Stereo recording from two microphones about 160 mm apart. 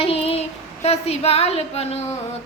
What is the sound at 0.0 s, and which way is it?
Child singing, 35° left (ahead or behind).